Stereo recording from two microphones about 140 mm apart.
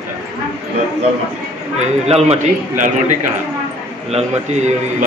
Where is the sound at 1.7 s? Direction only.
50° right (ahead or behind).